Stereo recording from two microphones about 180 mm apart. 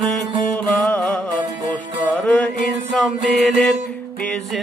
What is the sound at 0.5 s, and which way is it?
Music, 10° left (ahead or behind).